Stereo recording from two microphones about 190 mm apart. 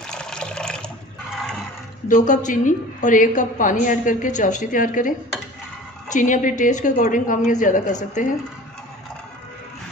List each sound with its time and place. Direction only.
0.0 s water: 5° left (ahead or behind)
2.0 s a woman's voice: 40° left (ahead or behind)
6.1 s a woman's voice: 40° left (ahead or behind)